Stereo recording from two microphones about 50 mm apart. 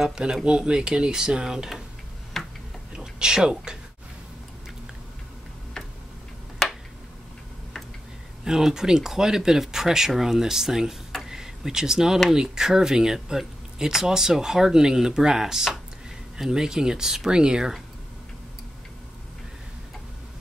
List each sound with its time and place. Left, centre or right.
0.0 s speech: centre
2.3 s tick-tock: centre
3.0 s speech: centre
6.6 s a sound: centre
8.5 s speech: centre